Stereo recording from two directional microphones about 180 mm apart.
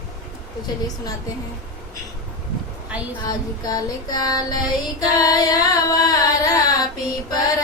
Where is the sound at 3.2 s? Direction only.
20° left (ahead or behind).